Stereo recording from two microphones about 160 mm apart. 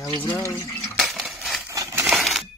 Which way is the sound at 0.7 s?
Centre (ahead or behind).